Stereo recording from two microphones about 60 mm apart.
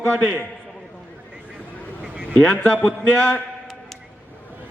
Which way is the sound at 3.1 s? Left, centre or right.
Left.